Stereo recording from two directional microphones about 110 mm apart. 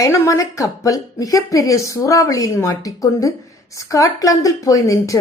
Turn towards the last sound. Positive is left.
turn(degrees=30)  # may be behind; listen again after turning